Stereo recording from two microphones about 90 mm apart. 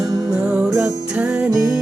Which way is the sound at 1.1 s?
15° right (ahead or behind).